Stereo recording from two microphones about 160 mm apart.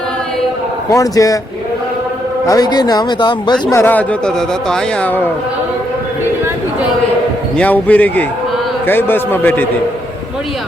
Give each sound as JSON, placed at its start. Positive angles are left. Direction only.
{"t": 0.9, "sound": "a man's voice", "side_deg": 20}
{"t": 2.5, "sound": "a man's voice", "side_deg": 25}
{"t": 3.8, "sound": "speech", "side_deg": 10}
{"t": 7.6, "sound": "speech", "side_deg": 10}